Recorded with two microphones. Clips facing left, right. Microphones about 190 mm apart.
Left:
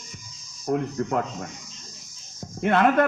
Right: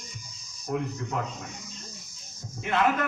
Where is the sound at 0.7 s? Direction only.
50° left (ahead or behind).